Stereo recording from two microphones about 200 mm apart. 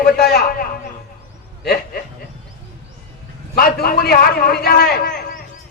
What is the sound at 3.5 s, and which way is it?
A man's voice, 50° left (ahead or behind).